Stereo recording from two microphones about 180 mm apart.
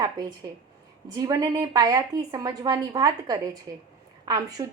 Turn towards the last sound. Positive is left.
turn(degrees=-20)  # may be behind; listen again after turning